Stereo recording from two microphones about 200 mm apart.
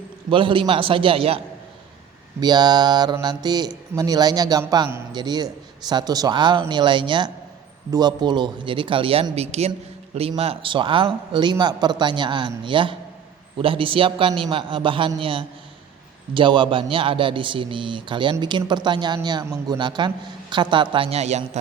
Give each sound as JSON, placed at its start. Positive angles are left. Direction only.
{"t": 0.3, "sound": "speech", "side_deg": -25}
{"t": 2.4, "sound": "speech", "side_deg": -20}